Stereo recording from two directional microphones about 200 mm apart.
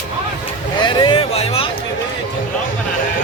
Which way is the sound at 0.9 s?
25° left (ahead or behind).